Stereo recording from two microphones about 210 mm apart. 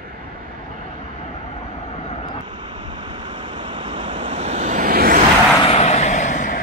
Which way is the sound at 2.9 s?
25° right (ahead or behind).